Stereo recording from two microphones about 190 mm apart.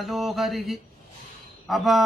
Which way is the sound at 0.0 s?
Centre (ahead or behind).